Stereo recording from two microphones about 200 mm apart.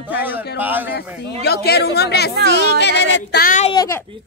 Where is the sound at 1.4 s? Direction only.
55° left (ahead or behind).